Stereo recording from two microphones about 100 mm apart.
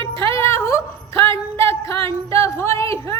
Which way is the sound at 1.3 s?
65° right (ahead or behind).